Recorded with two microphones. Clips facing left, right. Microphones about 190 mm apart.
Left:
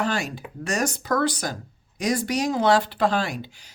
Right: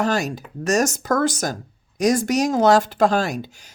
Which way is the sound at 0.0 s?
40° right (ahead or behind).